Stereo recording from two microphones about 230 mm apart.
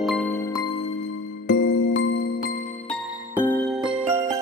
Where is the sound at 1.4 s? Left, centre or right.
Left.